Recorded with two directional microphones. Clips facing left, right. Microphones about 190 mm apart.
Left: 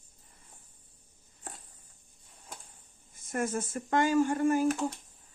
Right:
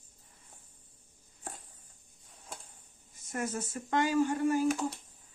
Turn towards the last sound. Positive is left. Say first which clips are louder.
# left 2 dB
turn(degrees=45)  # may be behind; listen again after turning